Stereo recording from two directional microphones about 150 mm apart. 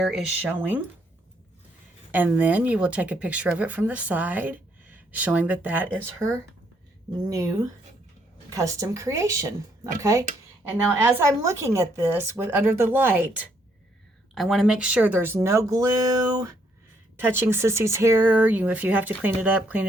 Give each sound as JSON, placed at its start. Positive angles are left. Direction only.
{"t": 0.0, "sound": "a woman's voice", "side_deg": -5}
{"t": 2.1, "sound": "a woman's voice", "side_deg": -10}
{"t": 7.3, "sound": "a woman's voice", "side_deg": -20}
{"t": 14.3, "sound": "a woman's voice", "side_deg": 0}